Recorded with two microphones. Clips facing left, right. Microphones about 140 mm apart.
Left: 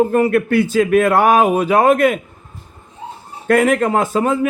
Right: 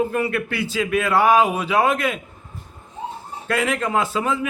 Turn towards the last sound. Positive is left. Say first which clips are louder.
# left 6 dB
turn(degrees=50)  # may be behind; listen again after turning